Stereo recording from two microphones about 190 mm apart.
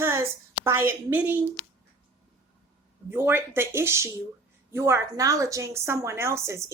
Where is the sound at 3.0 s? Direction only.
10° right (ahead or behind).